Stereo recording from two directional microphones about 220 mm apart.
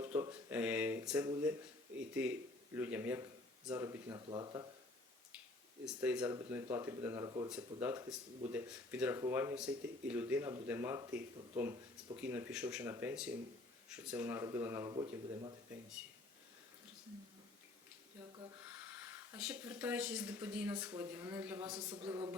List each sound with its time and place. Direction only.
0.0 s a sound: 10° right (ahead or behind)
0.5 s speech: 5° right (ahead or behind)
3.8 s speech: 20° right (ahead or behind)
5.8 s speech: 5° right (ahead or behind); by 15.5 s 20° right (ahead or behind)
18.9 s speech: 10° right (ahead or behind)
21.6 s speech: 20° right (ahead or behind)